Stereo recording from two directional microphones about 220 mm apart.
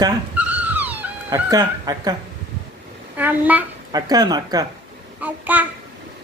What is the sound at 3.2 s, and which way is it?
Speech, 5° right (ahead or behind).